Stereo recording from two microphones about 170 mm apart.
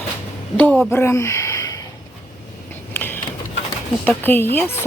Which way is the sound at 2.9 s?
10° left (ahead or behind).